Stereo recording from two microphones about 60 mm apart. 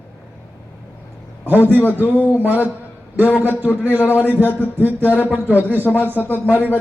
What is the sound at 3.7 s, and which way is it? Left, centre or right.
Speech, left.